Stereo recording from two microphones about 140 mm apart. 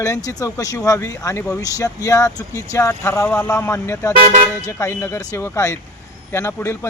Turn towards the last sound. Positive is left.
turn(degrees=20)  # may be behind; listen again after turning